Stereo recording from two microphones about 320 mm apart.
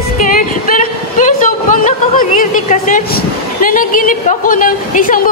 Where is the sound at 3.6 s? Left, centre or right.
Left.